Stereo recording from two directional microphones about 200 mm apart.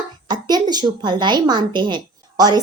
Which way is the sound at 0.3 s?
20° right (ahead or behind).